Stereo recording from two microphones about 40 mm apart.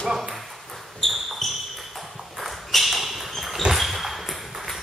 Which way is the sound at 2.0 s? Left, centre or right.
Centre.